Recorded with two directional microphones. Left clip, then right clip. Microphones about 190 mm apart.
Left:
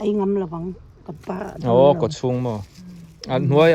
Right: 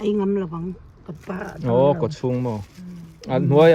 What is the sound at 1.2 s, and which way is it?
Speech, 50° left (ahead or behind).